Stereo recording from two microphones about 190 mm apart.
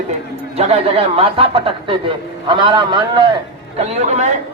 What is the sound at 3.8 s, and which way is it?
Speech, 35° right (ahead or behind).